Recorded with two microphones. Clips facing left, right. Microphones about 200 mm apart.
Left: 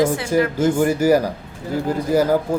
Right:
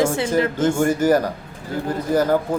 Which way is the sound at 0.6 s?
10° left (ahead or behind).